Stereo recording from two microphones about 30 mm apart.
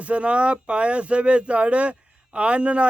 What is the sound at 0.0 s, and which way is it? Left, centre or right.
Speech, right.